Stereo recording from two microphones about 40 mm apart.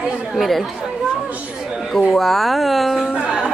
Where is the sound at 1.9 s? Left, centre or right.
Centre.